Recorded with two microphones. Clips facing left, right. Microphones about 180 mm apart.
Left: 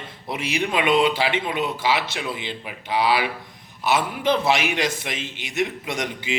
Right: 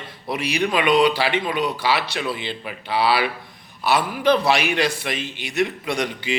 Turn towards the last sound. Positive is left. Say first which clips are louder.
# right 3 dB
turn(degrees=20)  # may be behind; listen again after turning